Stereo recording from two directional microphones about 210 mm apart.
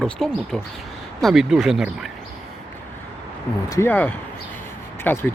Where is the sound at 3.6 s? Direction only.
10° left (ahead or behind).